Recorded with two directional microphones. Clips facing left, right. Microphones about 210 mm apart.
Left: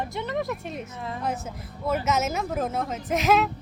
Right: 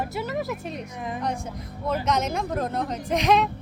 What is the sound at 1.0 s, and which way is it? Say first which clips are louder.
Speech: right 2 dB; 15° right (ahead or behind).